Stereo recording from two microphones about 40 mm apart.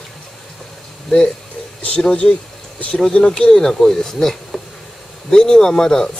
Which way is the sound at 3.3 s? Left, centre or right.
Centre.